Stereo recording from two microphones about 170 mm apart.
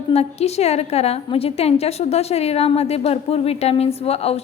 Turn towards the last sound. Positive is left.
turn(degrees=35)  # may be behind; listen again after turning